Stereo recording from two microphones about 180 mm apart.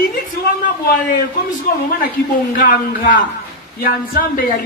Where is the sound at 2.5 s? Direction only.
50° left (ahead or behind).